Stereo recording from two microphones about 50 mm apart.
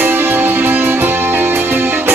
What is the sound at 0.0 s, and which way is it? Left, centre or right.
Music, right.